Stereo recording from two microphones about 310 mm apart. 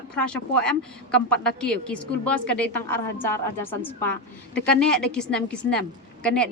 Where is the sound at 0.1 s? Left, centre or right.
Centre.